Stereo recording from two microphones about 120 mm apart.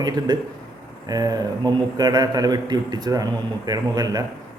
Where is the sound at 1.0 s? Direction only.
30° right (ahead or behind).